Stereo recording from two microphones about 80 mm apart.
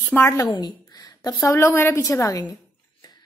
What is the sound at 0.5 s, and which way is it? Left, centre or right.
A woman's voice, left.